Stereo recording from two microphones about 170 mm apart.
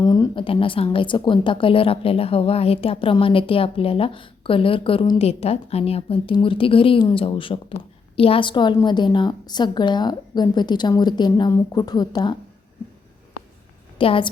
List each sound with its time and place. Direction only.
0.0 s a woman's voice: 20° left (ahead or behind)
14.0 s a woman's voice: 30° left (ahead or behind)